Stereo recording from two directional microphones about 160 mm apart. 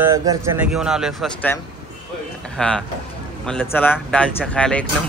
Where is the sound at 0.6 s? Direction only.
5° right (ahead or behind).